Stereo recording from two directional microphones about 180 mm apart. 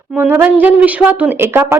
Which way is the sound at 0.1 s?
10° right (ahead or behind).